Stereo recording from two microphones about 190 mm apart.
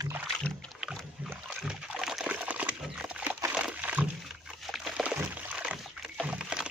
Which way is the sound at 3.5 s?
5° right (ahead or behind).